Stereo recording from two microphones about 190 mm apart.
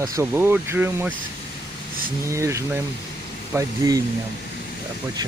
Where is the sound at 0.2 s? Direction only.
10° right (ahead or behind).